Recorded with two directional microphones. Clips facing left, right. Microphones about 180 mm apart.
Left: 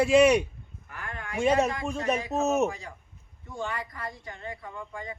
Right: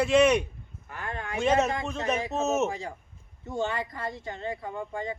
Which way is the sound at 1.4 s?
10° left (ahead or behind).